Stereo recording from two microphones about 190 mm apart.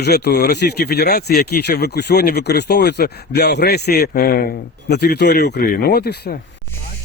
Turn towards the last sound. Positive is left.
turn(degrees=55)  # may be behind; listen again after turning